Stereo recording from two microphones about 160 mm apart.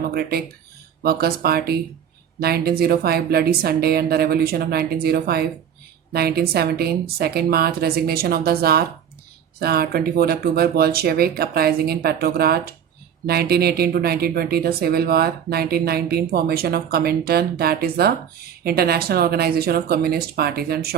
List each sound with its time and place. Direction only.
0.1 s speech: 75° right (ahead or behind)